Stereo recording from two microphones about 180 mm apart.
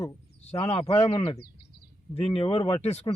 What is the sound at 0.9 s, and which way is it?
Speech, 35° left (ahead or behind).